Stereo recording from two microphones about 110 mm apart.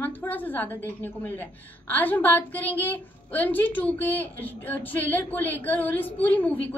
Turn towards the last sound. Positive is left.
turn(degrees=15)  # may be behind; listen again after turning